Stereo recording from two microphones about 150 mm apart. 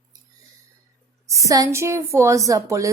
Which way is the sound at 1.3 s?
20° right (ahead or behind).